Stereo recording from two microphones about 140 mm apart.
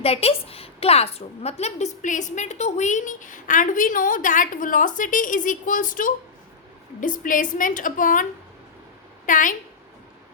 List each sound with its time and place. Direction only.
0.0 s a woman's voice: 45° left (ahead or behind); by 9.6 s 70° left (ahead or behind)